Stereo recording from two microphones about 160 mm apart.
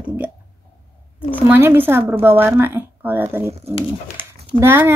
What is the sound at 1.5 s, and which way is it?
Speech, 15° right (ahead or behind).